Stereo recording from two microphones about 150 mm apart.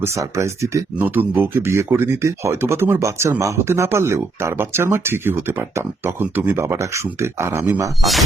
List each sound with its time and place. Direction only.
0.0 s speech: 20° right (ahead or behind)